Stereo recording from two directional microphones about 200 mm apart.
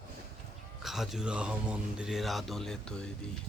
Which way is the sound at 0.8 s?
Centre (ahead or behind).